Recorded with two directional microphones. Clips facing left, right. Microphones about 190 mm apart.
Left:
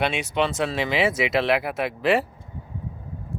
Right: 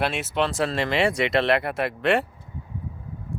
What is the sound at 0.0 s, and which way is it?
Speech, centre (ahead or behind).